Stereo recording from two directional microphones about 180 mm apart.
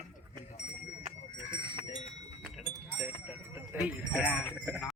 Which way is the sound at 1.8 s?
35° left (ahead or behind).